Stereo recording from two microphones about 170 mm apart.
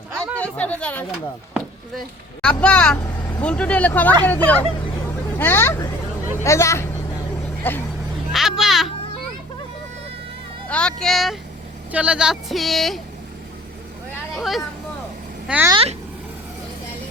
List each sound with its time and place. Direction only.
0.3 s speech: 5° left (ahead or behind)
8.3 s a sound: centre (ahead or behind)
10.7 s a sound: 5° left (ahead or behind)
11.9 s speech: 10° right (ahead or behind)
14.3 s speech: centre (ahead or behind)
15.7 s speech: 35° right (ahead or behind)